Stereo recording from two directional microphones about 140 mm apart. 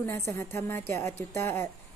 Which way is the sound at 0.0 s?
20° left (ahead or behind).